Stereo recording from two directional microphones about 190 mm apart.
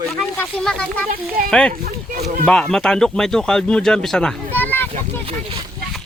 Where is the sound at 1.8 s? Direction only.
55° right (ahead or behind).